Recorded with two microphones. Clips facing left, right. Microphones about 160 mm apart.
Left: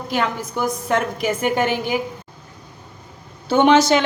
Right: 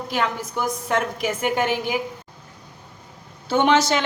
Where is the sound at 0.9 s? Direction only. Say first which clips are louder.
Left 3 dB; 5° right (ahead or behind).